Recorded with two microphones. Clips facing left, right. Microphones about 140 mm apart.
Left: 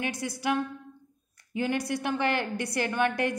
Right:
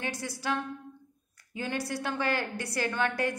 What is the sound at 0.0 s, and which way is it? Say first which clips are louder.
Speech: left 3 dB; 15° left (ahead or behind).